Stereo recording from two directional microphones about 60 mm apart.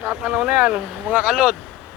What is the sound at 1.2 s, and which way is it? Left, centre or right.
Speech, centre.